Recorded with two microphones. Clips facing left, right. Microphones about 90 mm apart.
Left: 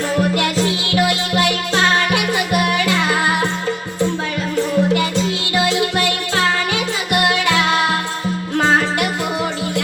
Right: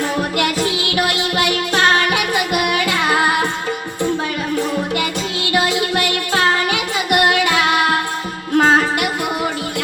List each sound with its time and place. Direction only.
0.3 s music: 15° right (ahead or behind)
4.9 s music: 15° right (ahead or behind)
7.1 s music: 15° right (ahead or behind)